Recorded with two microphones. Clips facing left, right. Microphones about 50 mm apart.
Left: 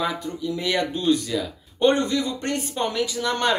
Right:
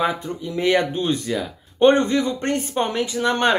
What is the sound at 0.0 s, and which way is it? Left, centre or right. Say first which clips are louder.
Speech: right 3 dB; right.